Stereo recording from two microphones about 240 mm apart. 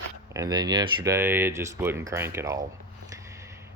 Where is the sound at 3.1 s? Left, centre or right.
Centre.